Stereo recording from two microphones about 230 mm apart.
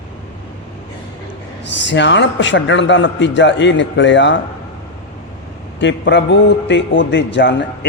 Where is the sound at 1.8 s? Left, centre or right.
Left.